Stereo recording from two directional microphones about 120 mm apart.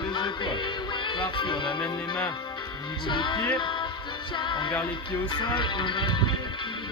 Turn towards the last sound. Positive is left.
turn(degrees=40)  # may be behind; listen again after turning